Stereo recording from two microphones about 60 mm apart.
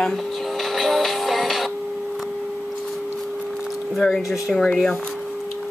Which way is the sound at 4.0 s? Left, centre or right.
Centre.